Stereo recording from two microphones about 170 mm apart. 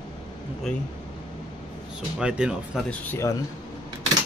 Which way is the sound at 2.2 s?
5° right (ahead or behind).